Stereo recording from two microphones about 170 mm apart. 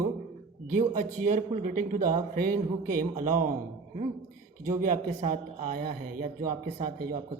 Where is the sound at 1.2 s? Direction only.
45° right (ahead or behind).